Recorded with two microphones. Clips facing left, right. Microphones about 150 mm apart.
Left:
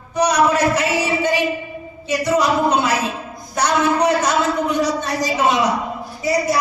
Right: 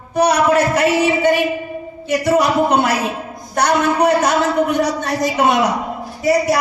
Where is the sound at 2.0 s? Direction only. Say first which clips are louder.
Right 2 dB; 55° right (ahead or behind).